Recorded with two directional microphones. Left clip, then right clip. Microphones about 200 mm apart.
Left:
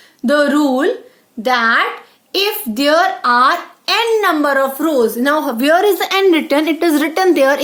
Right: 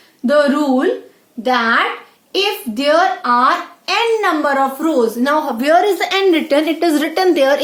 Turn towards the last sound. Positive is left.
turn(degrees=30)  # may be behind; listen again after turning